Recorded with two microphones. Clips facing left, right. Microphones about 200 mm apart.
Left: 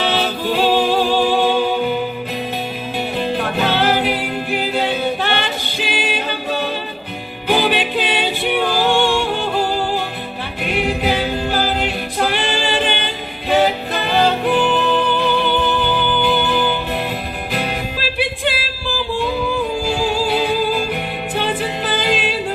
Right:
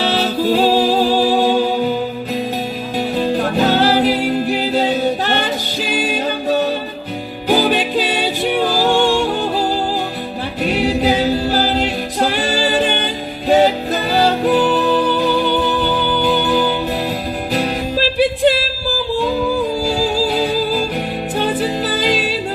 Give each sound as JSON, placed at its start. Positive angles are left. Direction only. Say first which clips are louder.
{"t": 0.0, "sound": "music", "louder": "right 3 dB", "side_deg": -40}
{"t": 3.3, "sound": "music", "louder": "right 4 dB", "side_deg": -40}
{"t": 10.6, "sound": "singing", "louder": "right 4 dB", "side_deg": -35}
{"t": 13.5, "sound": "music", "louder": "right 3 dB", "side_deg": -40}